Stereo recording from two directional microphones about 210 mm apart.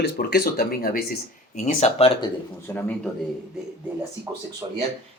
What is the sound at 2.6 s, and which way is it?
Speech, 10° left (ahead or behind).